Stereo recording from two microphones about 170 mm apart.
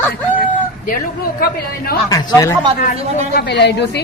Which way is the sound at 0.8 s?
55° left (ahead or behind).